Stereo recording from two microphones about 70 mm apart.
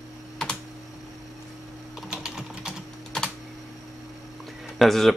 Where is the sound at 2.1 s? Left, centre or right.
Centre.